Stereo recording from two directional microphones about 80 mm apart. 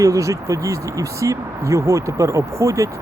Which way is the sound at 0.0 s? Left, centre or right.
Right.